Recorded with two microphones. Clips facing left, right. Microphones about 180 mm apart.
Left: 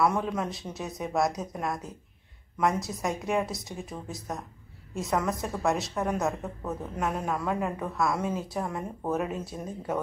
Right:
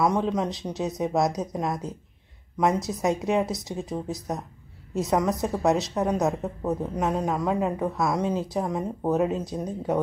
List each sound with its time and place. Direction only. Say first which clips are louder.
0.0 s a woman's voice: right 3 dB; 20° right (ahead or behind)
5.1 s a woman's voice: right 4 dB; 20° right (ahead or behind)